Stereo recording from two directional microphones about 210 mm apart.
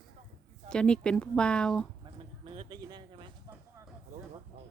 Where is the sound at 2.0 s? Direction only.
25° right (ahead or behind).